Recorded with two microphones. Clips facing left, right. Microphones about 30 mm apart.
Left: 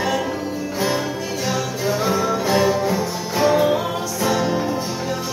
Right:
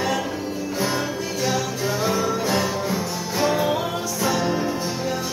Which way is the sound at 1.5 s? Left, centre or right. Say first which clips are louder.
Left 3 dB; centre.